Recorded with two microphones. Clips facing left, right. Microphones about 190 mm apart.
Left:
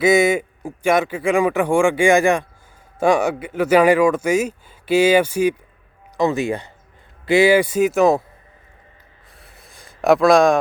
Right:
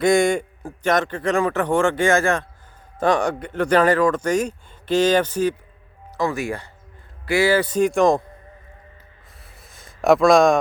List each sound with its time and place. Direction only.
0.0 s speech: 5° left (ahead or behind)
6.1 s speech: 20° left (ahead or behind); by 8.2 s 5° left (ahead or behind)
9.4 s a sound: centre (ahead or behind)